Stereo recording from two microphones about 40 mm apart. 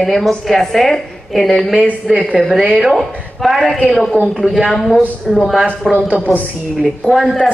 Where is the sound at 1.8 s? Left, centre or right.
Right.